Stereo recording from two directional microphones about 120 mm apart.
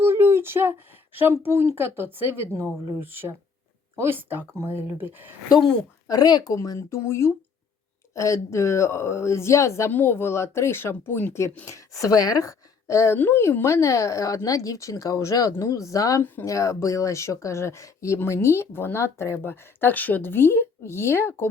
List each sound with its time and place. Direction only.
0.0 s a sound: 20° right (ahead or behind)
1.5 s speech: 20° right (ahead or behind)
6.1 s a woman's voice: 30° left (ahead or behind)
16.2 s speech: 15° left (ahead or behind)
16.5 s speech: 25° left (ahead or behind)